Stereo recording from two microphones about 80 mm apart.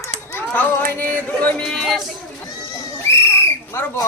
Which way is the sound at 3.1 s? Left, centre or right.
Left.